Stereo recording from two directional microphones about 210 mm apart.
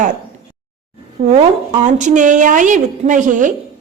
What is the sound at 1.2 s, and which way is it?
A woman's voice, 30° right (ahead or behind).